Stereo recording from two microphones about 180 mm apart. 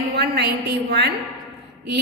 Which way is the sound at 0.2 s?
65° right (ahead or behind).